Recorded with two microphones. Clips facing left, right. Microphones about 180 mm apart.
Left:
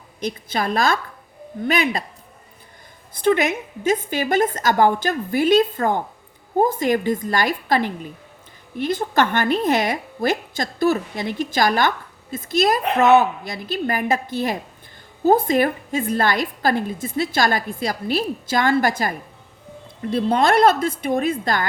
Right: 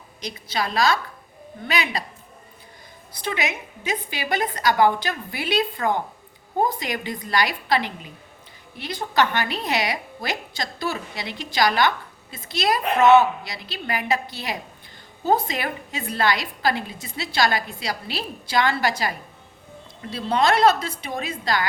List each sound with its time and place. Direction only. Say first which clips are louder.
0.2 s a woman's voice: left 4 dB; 50° left (ahead or behind)
3.1 s a woman's voice: left 9 dB; 50° left (ahead or behind)